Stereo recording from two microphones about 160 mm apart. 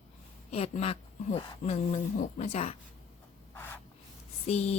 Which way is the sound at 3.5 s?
15° left (ahead or behind).